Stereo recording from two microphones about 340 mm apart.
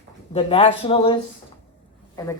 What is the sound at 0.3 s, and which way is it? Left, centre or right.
A woman's voice, centre.